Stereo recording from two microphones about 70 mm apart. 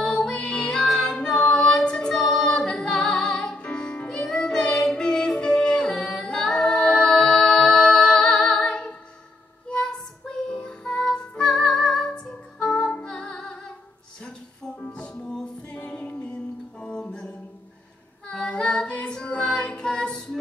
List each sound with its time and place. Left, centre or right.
0.0 s music: centre
18.3 s a capella: centre